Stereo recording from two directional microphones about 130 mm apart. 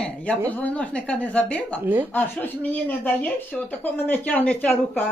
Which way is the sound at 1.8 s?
15° right (ahead or behind).